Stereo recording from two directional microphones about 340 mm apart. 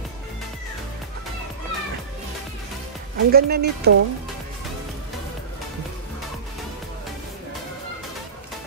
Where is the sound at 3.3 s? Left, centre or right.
Right.